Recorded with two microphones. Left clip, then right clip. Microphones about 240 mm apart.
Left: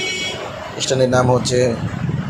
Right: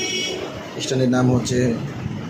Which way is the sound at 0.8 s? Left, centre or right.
Left.